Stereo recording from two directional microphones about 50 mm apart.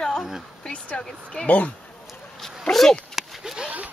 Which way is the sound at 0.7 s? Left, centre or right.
Centre.